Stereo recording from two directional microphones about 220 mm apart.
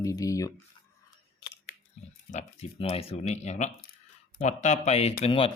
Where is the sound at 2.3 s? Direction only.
30° left (ahead or behind).